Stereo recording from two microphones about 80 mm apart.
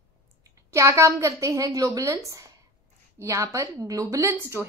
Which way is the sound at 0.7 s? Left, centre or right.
Right.